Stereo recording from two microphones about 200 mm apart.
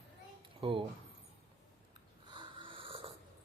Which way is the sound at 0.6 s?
25° right (ahead or behind).